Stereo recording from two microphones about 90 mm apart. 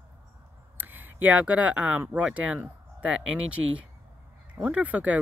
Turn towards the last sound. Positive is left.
turn(degrees=-15)  # may be behind; listen again after turning